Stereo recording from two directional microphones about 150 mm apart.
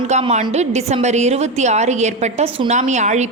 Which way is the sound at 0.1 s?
45° right (ahead or behind).